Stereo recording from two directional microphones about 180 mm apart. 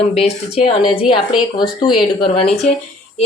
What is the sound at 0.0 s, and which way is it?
A woman's voice, 35° left (ahead or behind).